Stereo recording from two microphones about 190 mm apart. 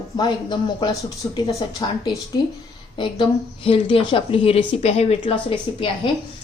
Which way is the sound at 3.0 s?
25° left (ahead or behind).